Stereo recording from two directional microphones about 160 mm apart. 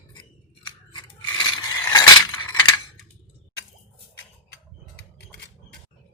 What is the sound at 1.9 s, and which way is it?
Vehicle, 15° left (ahead or behind).